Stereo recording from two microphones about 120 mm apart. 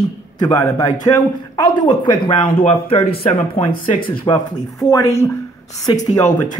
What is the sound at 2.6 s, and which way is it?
Speech, 55° left (ahead or behind).